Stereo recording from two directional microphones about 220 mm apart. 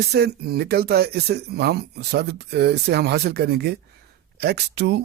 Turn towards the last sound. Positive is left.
turn(degrees=-50)  # may be behind; listen again after turning